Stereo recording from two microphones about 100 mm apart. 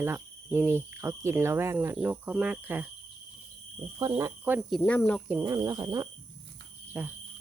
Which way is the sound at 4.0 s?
40° right (ahead or behind).